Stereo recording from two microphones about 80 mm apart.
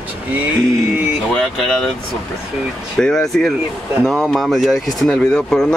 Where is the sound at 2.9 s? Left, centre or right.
Centre.